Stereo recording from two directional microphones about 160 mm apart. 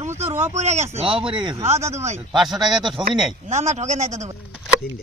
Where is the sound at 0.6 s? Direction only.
45° right (ahead or behind).